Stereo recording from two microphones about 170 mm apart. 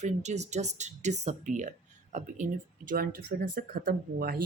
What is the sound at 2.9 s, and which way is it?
Speech, 60° right (ahead or behind).